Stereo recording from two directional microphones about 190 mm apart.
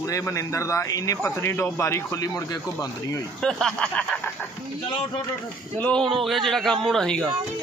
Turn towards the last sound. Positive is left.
turn(degrees=5)  # may be behind; listen again after turning